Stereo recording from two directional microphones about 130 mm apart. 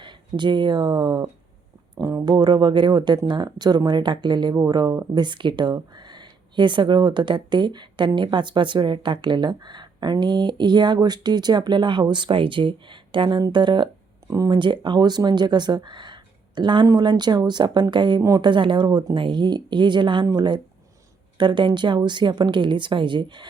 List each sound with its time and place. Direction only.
0.0 s speech: 35° right (ahead or behind)